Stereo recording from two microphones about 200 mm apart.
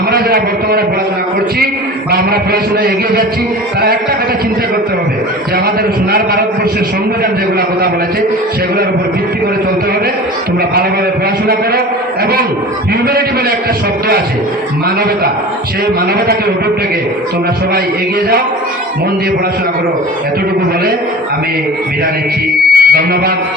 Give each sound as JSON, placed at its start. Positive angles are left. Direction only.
{"t": 0.1, "sound": "a sound", "side_deg": -50}
{"t": 2.0, "sound": "a man's voice", "side_deg": -50}
{"t": 6.1, "sound": "a man's voice", "side_deg": -50}
{"t": 22.7, "sound": "music", "side_deg": -50}